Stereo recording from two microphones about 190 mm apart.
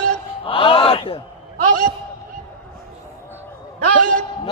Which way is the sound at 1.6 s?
45° right (ahead or behind).